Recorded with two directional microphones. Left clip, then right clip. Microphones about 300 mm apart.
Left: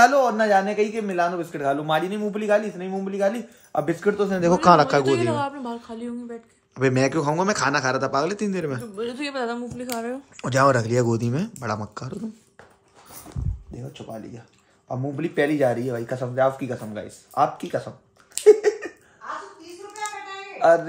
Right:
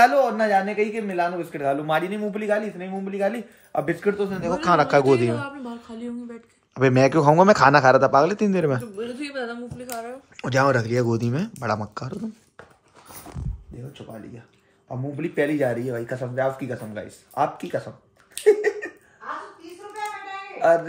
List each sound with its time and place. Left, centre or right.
0.0 s speech: centre
4.2 s speech: left
4.6 s speech: centre
8.9 s speech: centre
10.3 s speech: centre
14.9 s speech: centre
18.4 s a sound: centre